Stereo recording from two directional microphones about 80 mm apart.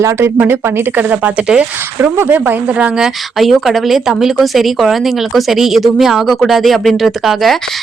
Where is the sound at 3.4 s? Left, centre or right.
Centre.